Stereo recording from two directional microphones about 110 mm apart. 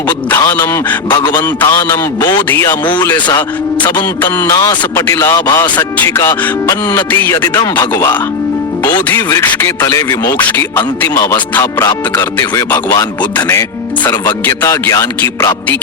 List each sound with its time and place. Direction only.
0.3 s speech: 30° left (ahead or behind)
1.1 s speech: 40° left (ahead or behind)
4.9 s speech: 25° left (ahead or behind)
5.3 s speech: 40° left (ahead or behind)
6.0 s speech: 25° left (ahead or behind)
7.5 s speech: 40° left (ahead or behind)
9.4 s speech: 20° left (ahead or behind)
9.8 s speech: 35° left (ahead or behind)
10.3 s speech: 15° left (ahead or behind)
11.6 s speech: 35° left (ahead or behind)
13.3 s speech: 25° left (ahead or behind)
14.0 s speech: 40° left (ahead or behind)
14.4 s speech: 25° left (ahead or behind)